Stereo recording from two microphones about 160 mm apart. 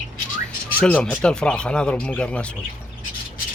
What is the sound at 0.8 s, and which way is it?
Speech, 10° left (ahead or behind).